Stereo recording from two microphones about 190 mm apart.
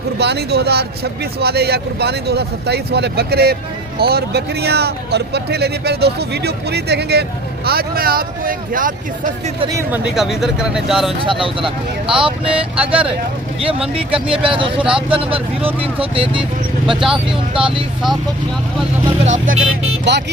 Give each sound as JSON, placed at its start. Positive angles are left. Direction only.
{"t": 0.2, "sound": "speech", "side_deg": -60}
{"t": 9.7, "sound": "speech", "side_deg": -10}
{"t": 11.2, "sound": "speech", "side_deg": -25}
{"t": 12.5, "sound": "speech", "side_deg": -5}
{"t": 13.6, "sound": "speech", "side_deg": -30}
{"t": 16.4, "sound": "speech", "side_deg": 0}
{"t": 17.2, "sound": "speech", "side_deg": -25}
{"t": 19.2, "sound": "speech", "side_deg": -40}
{"t": 20.1, "sound": "speech", "side_deg": -65}